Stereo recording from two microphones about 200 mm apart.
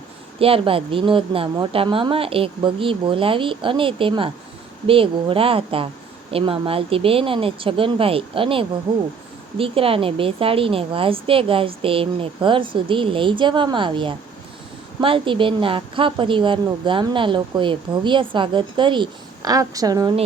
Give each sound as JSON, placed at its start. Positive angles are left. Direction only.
{"t": 0.3, "sound": "a woman's voice", "side_deg": -30}